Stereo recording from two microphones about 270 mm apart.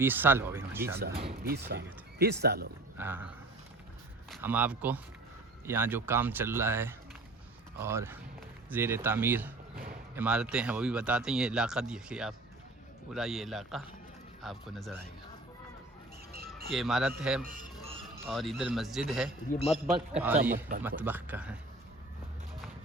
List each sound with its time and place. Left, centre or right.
0.0 s speech: centre
1.2 s speech: right
3.0 s speech: centre
16.7 s speech: centre
17.4 s a sound: right
18.3 s speech: centre
19.5 s a man's voice: left
20.2 s speech: centre